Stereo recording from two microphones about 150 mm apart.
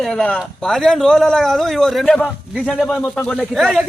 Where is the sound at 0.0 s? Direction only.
5° left (ahead or behind).